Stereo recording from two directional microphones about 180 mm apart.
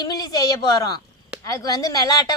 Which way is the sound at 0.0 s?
20° left (ahead or behind).